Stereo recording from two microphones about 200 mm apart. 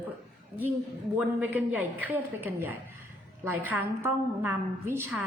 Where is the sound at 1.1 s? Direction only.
10° right (ahead or behind).